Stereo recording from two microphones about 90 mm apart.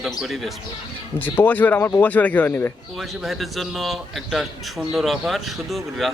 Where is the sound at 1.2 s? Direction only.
20° left (ahead or behind).